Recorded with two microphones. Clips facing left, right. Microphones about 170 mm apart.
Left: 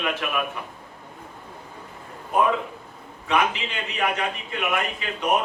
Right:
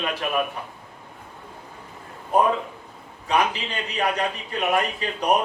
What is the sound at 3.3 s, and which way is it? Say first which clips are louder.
A man's voice: right 1 dB; 35° right (ahead or behind).